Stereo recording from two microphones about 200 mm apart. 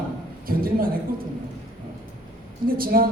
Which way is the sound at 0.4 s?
45° right (ahead or behind).